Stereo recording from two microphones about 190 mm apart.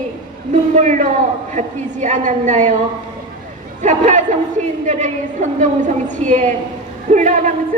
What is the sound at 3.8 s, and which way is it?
A woman's voice, 40° right (ahead or behind).